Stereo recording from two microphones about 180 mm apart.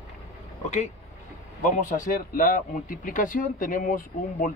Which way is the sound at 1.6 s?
50° left (ahead or behind).